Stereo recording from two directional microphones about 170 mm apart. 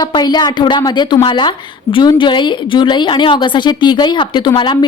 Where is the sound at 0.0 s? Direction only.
25° left (ahead or behind).